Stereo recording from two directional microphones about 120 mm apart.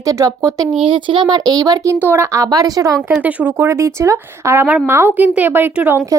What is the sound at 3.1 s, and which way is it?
Speech, 15° right (ahead or behind).